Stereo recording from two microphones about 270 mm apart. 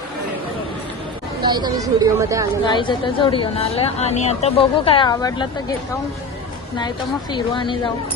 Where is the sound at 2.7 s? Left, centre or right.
Centre.